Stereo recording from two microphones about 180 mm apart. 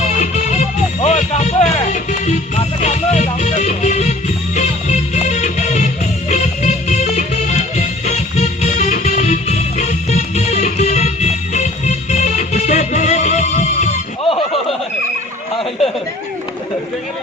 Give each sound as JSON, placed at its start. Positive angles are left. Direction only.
{"t": 0.2, "sound": "music", "side_deg": 40}